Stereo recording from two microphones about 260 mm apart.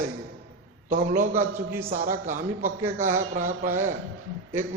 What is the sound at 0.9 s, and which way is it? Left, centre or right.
A man's voice, right.